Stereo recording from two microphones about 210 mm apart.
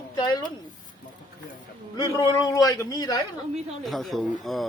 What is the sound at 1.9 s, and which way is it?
Speech, 20° left (ahead or behind).